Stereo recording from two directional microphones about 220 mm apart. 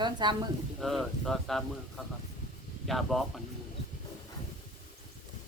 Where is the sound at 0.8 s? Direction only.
Centre (ahead or behind).